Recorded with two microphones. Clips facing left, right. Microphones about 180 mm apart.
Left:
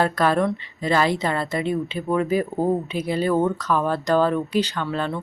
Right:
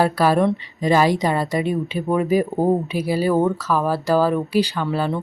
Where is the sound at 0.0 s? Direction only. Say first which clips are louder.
Right 3 dB; 10° right (ahead or behind).